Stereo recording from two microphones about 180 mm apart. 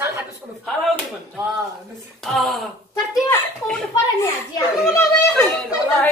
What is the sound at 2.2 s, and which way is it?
Speech, centre (ahead or behind).